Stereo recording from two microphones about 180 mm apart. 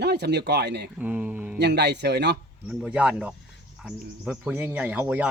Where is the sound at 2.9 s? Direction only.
5° right (ahead or behind).